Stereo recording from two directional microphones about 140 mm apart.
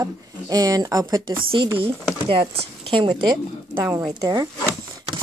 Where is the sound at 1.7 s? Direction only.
40° right (ahead or behind).